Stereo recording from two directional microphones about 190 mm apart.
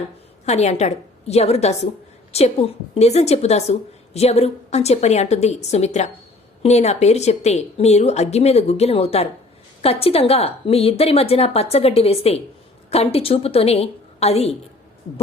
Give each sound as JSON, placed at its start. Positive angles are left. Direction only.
{"t": 0.4, "sound": "a woman's voice", "side_deg": 35}